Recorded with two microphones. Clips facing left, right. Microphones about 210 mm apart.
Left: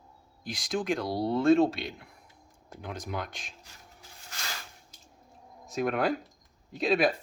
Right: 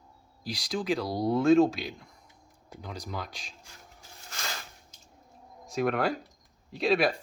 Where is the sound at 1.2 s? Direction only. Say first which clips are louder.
Right 3 dB; 30° left (ahead or behind).